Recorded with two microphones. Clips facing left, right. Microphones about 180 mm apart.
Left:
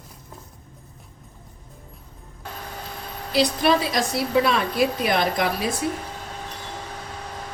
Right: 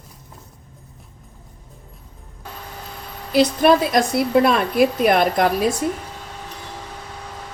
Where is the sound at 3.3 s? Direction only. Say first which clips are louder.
Right 5 dB; 50° right (ahead or behind).